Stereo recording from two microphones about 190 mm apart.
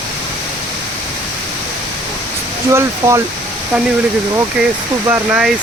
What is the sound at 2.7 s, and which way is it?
Speech, 15° right (ahead or behind).